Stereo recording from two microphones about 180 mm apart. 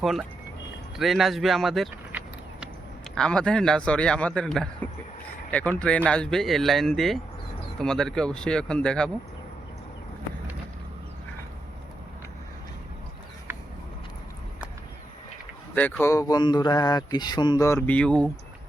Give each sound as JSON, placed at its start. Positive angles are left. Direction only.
{"t": 0.0, "sound": "a man's voice", "side_deg": 0}
{"t": 15.7, "sound": "speech", "side_deg": 10}